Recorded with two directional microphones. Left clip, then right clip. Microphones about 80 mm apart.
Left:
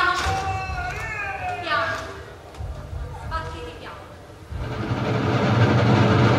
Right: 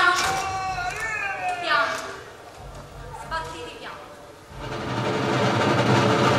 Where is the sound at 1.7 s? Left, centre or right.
Right.